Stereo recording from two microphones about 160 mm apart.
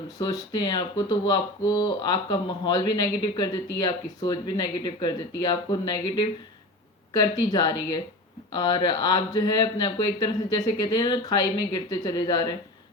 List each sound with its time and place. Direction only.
0.2 s speech: 25° left (ahead or behind)